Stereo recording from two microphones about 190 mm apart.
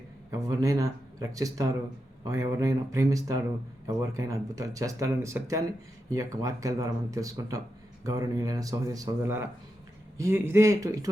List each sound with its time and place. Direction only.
0.3 s speech: 20° right (ahead or behind)